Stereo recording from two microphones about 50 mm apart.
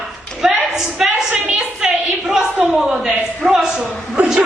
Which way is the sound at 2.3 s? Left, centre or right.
Centre.